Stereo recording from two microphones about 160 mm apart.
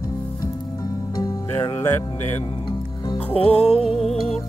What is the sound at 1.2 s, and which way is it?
Music, 20° left (ahead or behind).